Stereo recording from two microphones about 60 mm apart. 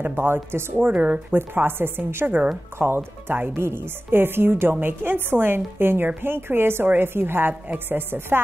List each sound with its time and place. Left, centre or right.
0.0 s speech: right
1.3 s speech: right
2.2 s a woman's voice: right